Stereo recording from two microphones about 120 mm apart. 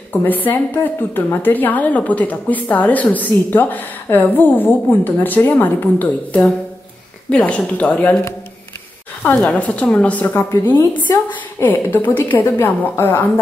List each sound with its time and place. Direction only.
0.1 s a woman's voice: 15° left (ahead or behind)
9.2 s a woman's voice: 10° left (ahead or behind)